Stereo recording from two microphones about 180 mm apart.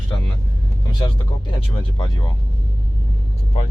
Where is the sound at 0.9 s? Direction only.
25° left (ahead or behind).